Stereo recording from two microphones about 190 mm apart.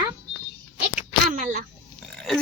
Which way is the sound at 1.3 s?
40° right (ahead or behind).